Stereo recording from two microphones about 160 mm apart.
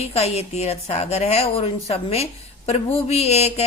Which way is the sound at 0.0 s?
40° left (ahead or behind).